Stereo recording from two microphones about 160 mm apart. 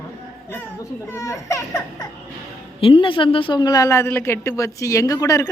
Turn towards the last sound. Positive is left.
turn(degrees=20)  # may be behind; listen again after turning